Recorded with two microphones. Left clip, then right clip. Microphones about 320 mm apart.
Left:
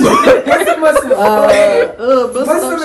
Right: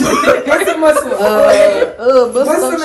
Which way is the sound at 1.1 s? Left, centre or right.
Centre.